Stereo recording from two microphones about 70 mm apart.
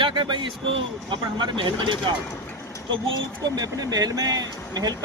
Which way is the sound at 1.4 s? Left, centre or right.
Right.